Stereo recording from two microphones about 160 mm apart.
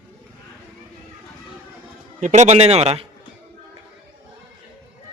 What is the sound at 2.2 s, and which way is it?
Speech, 45° right (ahead or behind).